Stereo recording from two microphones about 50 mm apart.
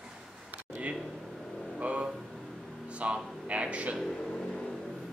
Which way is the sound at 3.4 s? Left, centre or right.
Right.